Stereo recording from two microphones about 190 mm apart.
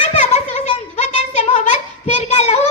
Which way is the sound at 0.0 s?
35° left (ahead or behind).